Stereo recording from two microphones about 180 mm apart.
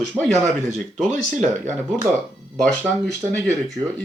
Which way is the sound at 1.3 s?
45° right (ahead or behind).